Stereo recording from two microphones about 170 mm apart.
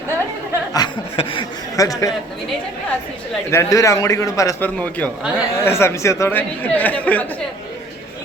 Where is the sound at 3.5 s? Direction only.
15° left (ahead or behind).